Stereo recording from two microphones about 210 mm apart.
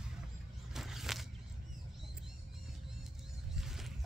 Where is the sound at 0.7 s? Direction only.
Centre (ahead or behind).